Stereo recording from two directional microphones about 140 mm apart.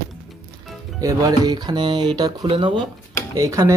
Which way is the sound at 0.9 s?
25° right (ahead or behind).